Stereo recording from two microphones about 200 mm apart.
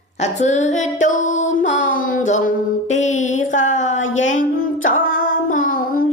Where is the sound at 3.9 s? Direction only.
75° left (ahead or behind).